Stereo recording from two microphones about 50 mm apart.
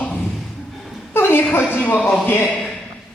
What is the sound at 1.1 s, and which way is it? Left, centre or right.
A woman's voice, left.